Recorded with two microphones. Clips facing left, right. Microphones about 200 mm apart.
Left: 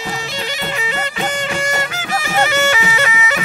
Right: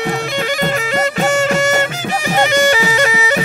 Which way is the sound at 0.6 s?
45° right (ahead or behind).